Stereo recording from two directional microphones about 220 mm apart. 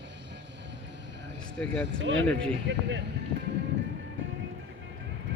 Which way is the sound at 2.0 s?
55° right (ahead or behind).